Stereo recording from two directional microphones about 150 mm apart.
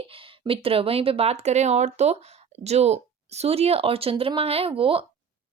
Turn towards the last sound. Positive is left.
turn(degrees=-40)  # may be behind; listen again after turning